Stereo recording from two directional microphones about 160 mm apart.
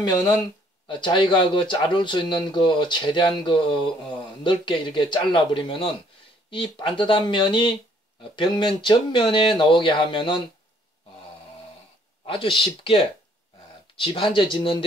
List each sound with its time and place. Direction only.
0.0 s speech: 25° left (ahead or behind)
12.3 s speech: 30° left (ahead or behind)